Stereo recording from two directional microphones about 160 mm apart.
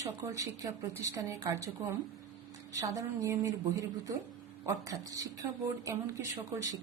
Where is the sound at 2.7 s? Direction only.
20° right (ahead or behind).